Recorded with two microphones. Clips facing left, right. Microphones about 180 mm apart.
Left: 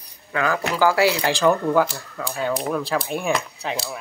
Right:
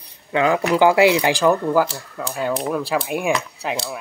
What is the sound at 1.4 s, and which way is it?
Speech, 5° right (ahead or behind).